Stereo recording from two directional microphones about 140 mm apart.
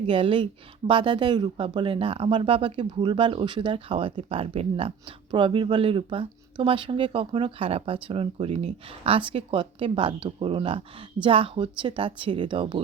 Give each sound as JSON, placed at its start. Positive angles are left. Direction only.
{"t": 0.1, "sound": "speech", "side_deg": -40}